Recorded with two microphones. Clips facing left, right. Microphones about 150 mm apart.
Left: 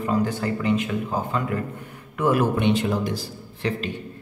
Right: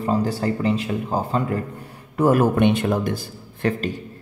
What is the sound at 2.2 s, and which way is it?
A man's voice, 45° right (ahead or behind).